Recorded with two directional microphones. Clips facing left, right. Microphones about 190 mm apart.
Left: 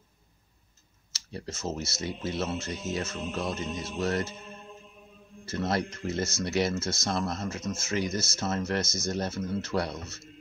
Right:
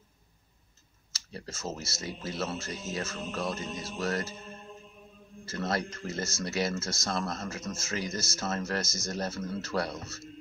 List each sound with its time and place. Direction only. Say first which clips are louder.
1.1 s speech: left 4 dB; 25° left (ahead or behind)
5.4 s speech: left 3 dB; 25° left (ahead or behind)